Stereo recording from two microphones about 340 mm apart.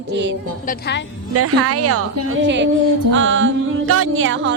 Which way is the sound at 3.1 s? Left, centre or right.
Right.